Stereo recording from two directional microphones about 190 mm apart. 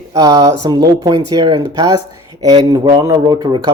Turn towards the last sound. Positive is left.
turn(degrees=-25)  # may be behind; listen again after turning